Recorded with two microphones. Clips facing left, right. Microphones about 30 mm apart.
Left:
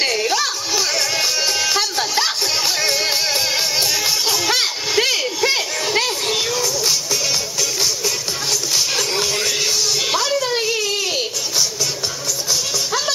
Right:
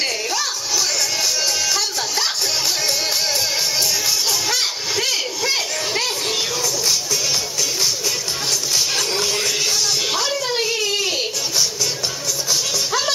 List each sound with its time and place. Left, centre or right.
0.0 s music: centre
8.7 s music: centre